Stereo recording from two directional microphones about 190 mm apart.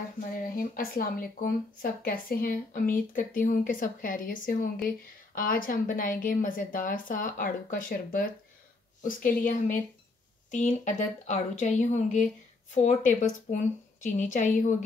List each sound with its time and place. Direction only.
0.4 s a woman's voice: 50° left (ahead or behind)